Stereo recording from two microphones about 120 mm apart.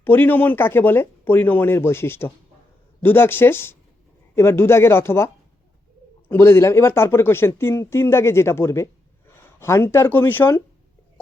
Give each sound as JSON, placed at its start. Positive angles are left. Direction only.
{"t": 0.0, "sound": "speech", "side_deg": 15}